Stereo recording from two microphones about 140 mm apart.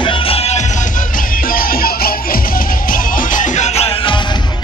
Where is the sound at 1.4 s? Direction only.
90° left; by 4.2 s 40° left (ahead or behind).